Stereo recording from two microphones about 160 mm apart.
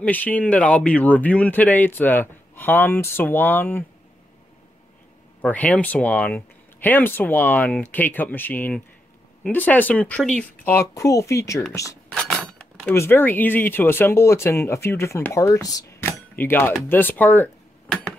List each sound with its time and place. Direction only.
0.0 s speech: 10° left (ahead or behind)
5.4 s speech: 10° left (ahead or behind)
11.7 s a sound: 20° left (ahead or behind)
12.1 s cutlery: 5° left (ahead or behind)
12.9 s speech: 15° left (ahead or behind)